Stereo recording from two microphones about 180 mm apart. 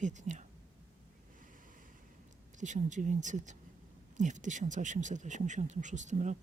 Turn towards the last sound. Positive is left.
turn(degrees=-40)  # may be behind; listen again after turning